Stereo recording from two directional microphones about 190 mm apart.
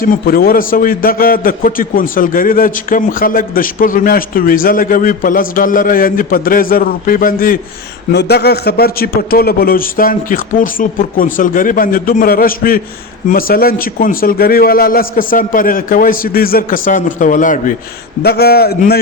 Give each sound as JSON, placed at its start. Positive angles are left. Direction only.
{"t": 0.0, "sound": "a man's voice", "side_deg": 50}
{"t": 8.1, "sound": "a man's voice", "side_deg": 60}
{"t": 18.2, "sound": "a man's voice", "side_deg": 55}